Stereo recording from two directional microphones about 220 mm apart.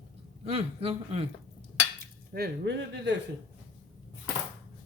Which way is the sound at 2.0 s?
45° right (ahead or behind).